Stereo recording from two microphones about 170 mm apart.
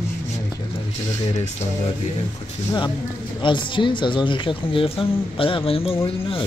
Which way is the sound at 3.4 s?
30° left (ahead or behind).